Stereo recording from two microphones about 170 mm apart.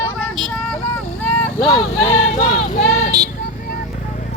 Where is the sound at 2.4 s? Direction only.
45° left (ahead or behind).